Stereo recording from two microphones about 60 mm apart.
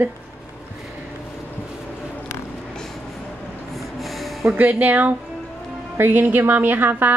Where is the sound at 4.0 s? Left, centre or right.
Centre.